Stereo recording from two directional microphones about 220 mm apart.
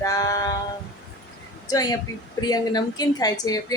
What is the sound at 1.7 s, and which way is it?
A woman's voice, 15° left (ahead or behind).